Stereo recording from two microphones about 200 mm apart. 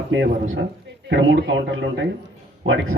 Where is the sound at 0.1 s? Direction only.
65° right (ahead or behind).